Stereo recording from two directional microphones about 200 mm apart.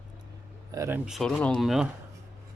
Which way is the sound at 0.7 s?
15° right (ahead or behind).